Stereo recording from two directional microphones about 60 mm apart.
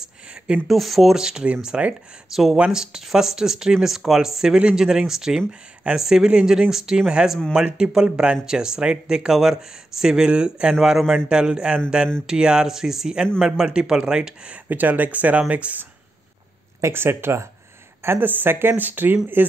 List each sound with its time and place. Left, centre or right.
0.7 s speech: centre
10.7 s a man's voice: centre
14.7 s speech: right
16.9 s speech: right